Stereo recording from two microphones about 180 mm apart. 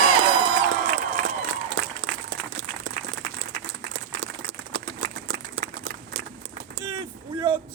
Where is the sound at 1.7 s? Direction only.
85° right.